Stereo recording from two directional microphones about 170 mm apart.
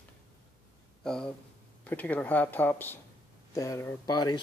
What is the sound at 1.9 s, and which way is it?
Speech, 10° left (ahead or behind).